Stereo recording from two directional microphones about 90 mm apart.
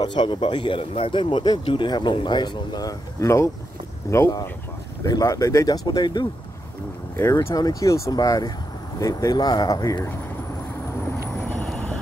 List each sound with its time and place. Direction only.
0.0 s speech: 60° left (ahead or behind)
1.6 s speech: 70° left (ahead or behind); by 6.2 s 50° left (ahead or behind)
7.2 s speech: 35° left (ahead or behind)